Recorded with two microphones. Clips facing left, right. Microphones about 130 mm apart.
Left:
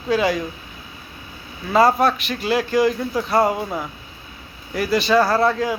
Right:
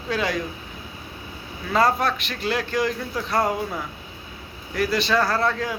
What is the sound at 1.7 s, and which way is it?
Speech, 5° left (ahead or behind).